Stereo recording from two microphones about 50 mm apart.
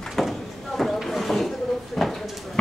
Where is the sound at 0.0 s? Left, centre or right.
Centre.